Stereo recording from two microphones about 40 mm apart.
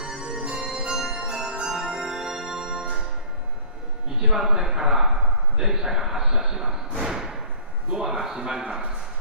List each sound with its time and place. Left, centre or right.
0.0 s music: centre
4.2 s a man's voice: centre
7.0 s thump: centre
7.9 s a man's voice: centre